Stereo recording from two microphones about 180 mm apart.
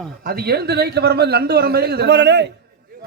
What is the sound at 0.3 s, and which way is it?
A man's voice, 60° right (ahead or behind).